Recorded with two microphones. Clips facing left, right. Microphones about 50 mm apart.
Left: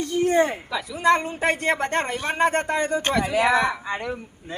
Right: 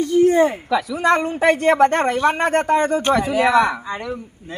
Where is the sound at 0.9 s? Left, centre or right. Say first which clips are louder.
Even; right.